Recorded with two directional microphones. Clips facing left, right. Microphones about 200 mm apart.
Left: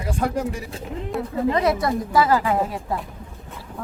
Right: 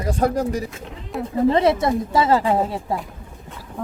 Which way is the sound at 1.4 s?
30° right (ahead or behind).